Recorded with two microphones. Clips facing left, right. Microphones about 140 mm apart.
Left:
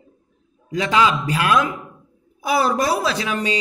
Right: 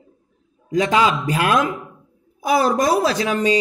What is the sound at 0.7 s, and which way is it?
Speech, 40° right (ahead or behind).